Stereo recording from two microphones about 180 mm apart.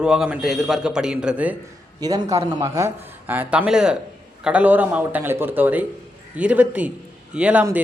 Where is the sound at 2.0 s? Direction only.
20° right (ahead or behind).